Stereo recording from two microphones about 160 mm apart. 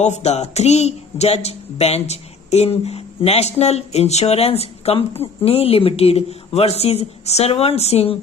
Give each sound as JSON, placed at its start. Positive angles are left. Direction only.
{"t": 0.0, "sound": "speech", "side_deg": 45}